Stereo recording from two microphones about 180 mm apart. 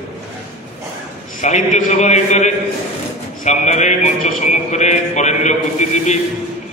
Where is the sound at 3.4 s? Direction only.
40° left (ahead or behind).